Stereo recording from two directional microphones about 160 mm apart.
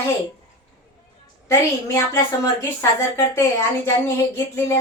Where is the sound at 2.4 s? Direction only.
20° left (ahead or behind).